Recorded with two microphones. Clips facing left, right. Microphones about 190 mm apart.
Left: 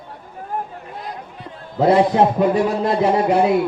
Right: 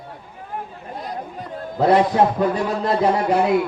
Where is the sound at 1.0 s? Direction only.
40° right (ahead or behind).